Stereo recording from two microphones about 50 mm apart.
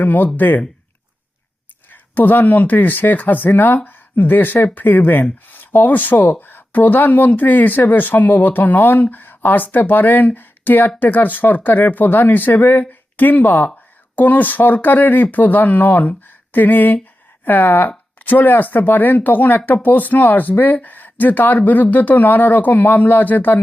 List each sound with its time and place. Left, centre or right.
0.0 s speech: left
1.9 s speech: left